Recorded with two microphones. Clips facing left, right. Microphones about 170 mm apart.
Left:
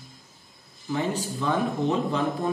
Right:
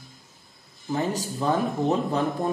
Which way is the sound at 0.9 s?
40° right (ahead or behind).